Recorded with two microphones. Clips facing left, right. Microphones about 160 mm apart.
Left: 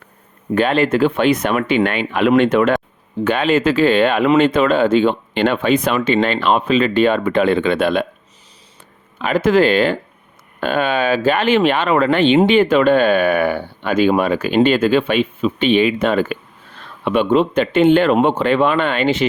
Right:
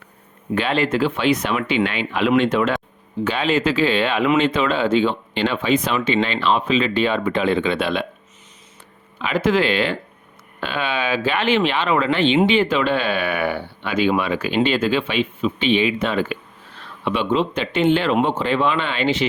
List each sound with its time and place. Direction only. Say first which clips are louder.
0.5 s speech: left 5 dB; 50° left (ahead or behind)
9.2 s speech: left 5 dB; 45° left (ahead or behind)